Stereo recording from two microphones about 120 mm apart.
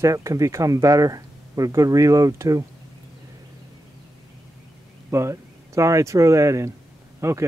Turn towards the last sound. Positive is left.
turn(degrees=-25)  # may be behind; listen again after turning